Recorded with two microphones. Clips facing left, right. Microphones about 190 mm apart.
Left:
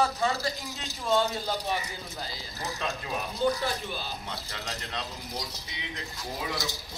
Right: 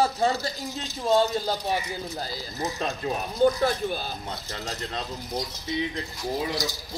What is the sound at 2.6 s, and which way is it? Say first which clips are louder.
Speech: right 5 dB; 35° right (ahead or behind).